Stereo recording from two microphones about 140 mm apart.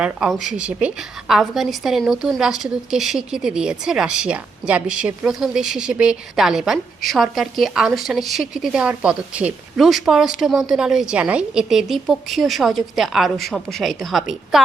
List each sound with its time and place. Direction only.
0.0 s a woman's voice: 5° right (ahead or behind)